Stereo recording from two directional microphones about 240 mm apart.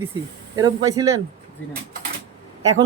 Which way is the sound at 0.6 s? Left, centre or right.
Centre.